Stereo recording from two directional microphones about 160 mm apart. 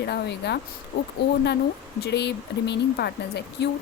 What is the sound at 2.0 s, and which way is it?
A woman's voice, 90° left.